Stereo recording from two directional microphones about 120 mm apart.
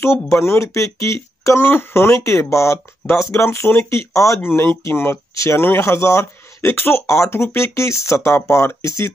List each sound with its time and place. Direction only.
0.4 s speech: 20° left (ahead or behind)